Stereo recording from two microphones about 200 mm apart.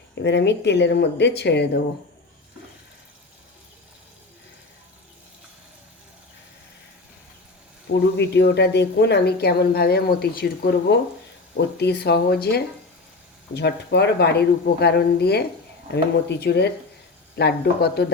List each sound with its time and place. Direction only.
0.2 s speech: 60° left (ahead or behind)
7.9 s speech: 60° left (ahead or behind)